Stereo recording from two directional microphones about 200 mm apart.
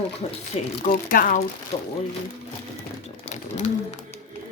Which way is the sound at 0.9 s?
45° left (ahead or behind).